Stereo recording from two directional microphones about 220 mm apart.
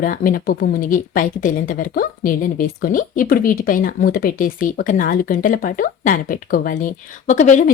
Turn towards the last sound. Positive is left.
turn(degrees=35)  # may be behind; listen again after turning